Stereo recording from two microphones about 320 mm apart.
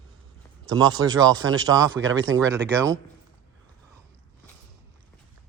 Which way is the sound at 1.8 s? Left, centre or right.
Right.